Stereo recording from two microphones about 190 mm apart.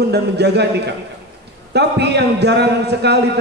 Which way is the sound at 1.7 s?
60° right (ahead or behind).